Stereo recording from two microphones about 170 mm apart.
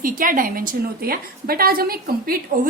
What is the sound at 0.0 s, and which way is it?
A woman's voice, 55° right (ahead or behind).